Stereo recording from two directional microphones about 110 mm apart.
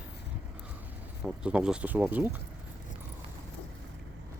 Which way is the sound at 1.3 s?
10° right (ahead or behind).